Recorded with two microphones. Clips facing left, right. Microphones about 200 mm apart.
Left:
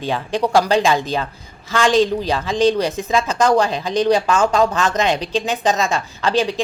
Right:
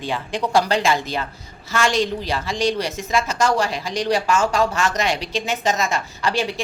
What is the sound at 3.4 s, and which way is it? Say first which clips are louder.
A woman's voice: left 7 dB; 20° left (ahead or behind).